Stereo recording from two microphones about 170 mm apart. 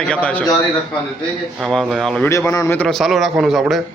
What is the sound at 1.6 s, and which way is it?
Speech, centre (ahead or behind).